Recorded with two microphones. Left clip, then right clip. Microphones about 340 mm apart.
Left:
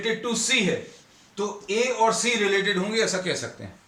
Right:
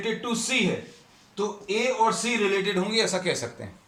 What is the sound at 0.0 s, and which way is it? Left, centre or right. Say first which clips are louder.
A man's voice: left 3 dB; centre.